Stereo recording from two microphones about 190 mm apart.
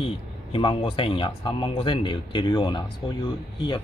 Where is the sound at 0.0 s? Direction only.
25° left (ahead or behind).